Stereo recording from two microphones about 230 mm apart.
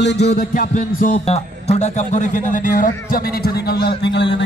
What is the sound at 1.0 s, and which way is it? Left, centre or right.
A man's voice, left.